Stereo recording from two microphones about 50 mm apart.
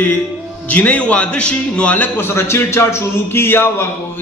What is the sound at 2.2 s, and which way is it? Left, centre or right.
A man's voice, left.